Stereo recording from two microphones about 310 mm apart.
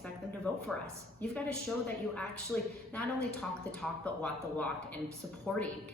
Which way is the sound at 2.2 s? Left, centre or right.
Centre.